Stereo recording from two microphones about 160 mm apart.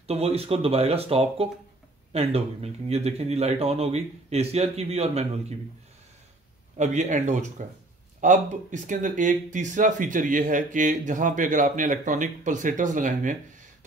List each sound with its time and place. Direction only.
0.0 s speech: 40° right (ahead or behind)
6.8 s speech: 50° right (ahead or behind)